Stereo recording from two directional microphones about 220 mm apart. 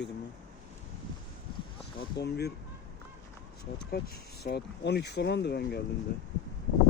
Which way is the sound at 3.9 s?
45° left (ahead or behind).